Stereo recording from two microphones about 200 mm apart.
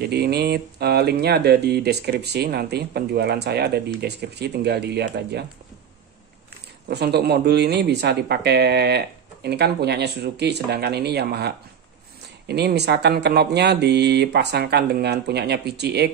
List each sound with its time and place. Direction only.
0.0 s speech: 55° right (ahead or behind)
6.9 s speech: 55° right (ahead or behind)